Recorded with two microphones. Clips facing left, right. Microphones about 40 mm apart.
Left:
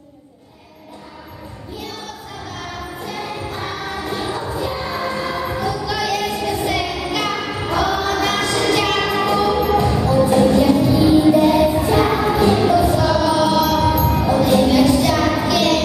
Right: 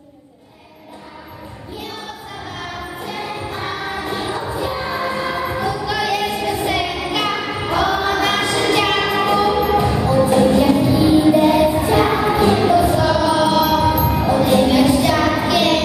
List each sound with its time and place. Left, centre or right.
2.6 s choir: centre
11.0 s music: centre